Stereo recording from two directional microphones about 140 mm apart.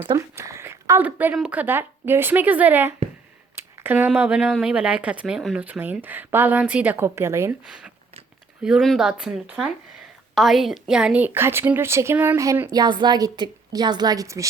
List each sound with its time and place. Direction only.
0.2 s speech: 20° right (ahead or behind)
8.6 s speech: centre (ahead or behind)
12.4 s a woman's voice: 20° right (ahead or behind)